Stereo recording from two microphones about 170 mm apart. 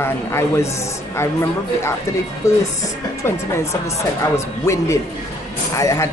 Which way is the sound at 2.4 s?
15° left (ahead or behind).